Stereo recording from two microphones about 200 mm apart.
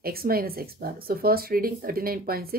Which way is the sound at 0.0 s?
50° right (ahead or behind).